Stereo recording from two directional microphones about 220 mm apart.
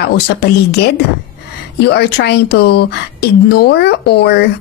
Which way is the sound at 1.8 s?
50° left (ahead or behind).